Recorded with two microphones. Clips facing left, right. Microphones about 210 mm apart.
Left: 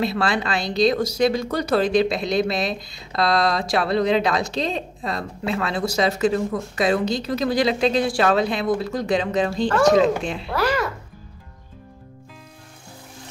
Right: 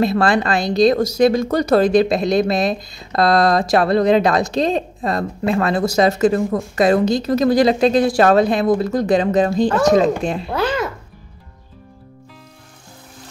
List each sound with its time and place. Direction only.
0.0 s speech: 45° right (ahead or behind)
10.5 s speech: 20° right (ahead or behind)